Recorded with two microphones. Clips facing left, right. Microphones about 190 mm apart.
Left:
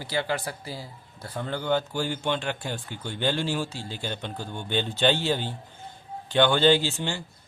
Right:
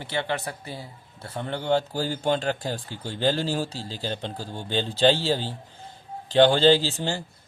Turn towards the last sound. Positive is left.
turn(degrees=-35)  # may be behind; listen again after turning